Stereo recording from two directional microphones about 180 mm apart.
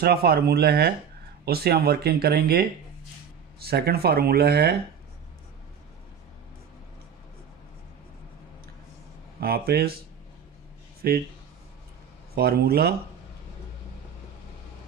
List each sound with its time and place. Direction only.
0.0 s speech: 60° right (ahead or behind)
9.4 s speech: 60° right (ahead or behind)
11.0 s speech: 60° right (ahead or behind)
12.4 s speech: 60° right (ahead or behind)